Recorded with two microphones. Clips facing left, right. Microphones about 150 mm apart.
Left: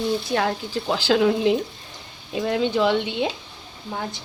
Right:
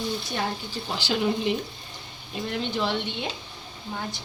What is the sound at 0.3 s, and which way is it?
Speech, 90° left.